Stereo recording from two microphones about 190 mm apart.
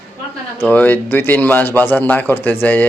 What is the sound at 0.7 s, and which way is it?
Speech, 10° left (ahead or behind).